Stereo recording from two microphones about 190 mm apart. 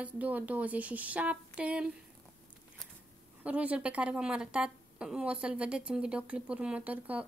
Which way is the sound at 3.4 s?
5° right (ahead or behind).